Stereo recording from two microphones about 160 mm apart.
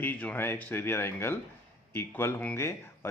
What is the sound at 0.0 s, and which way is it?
Speech, 10° left (ahead or behind).